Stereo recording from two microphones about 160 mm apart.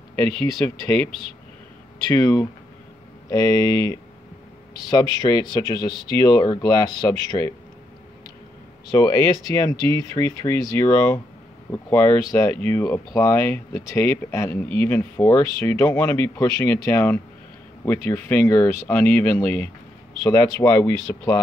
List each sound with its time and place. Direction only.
0.7 s speech: 15° left (ahead or behind)
3.3 s speech: 20° left (ahead or behind)
8.9 s speech: 20° left (ahead or behind)